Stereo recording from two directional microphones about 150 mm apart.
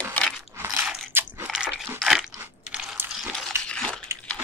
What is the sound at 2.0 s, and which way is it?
Crunch, centre (ahead or behind).